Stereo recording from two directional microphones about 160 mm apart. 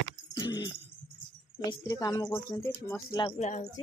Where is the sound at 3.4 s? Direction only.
45° left (ahead or behind).